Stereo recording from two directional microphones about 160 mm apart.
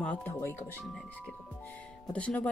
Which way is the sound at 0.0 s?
10° left (ahead or behind).